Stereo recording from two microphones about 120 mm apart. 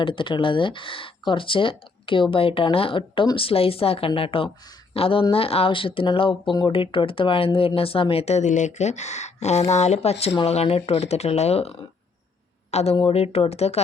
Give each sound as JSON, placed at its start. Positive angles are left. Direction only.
{"t": 0.0, "sound": "speech", "side_deg": 45}